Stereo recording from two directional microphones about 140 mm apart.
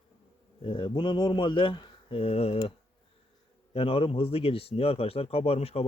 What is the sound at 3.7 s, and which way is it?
A man's voice, 40° left (ahead or behind).